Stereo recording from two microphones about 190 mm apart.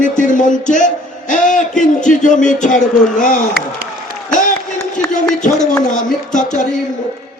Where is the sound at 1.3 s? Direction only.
40° left (ahead or behind).